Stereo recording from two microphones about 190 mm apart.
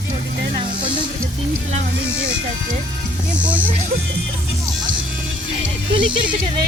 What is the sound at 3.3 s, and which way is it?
Speech, 5° right (ahead or behind).